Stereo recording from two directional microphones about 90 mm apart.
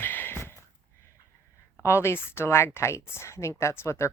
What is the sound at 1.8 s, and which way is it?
Speech, 30° left (ahead or behind).